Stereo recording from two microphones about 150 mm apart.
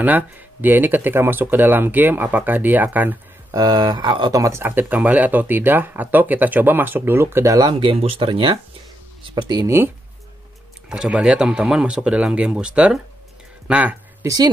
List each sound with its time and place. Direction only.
0.0 s speech: 10° right (ahead or behind)
3.5 s speech: 25° right (ahead or behind)
7.9 s speech: 40° right (ahead or behind)
10.9 s speech: 5° right (ahead or behind)
14.2 s speech: 25° right (ahead or behind)